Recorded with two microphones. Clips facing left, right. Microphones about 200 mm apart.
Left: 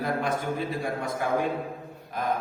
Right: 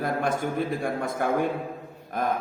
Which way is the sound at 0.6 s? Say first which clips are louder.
Right 3 dB; 50° right (ahead or behind).